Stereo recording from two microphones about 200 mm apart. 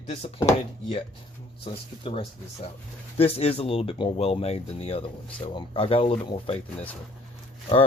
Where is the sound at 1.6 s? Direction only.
30° left (ahead or behind).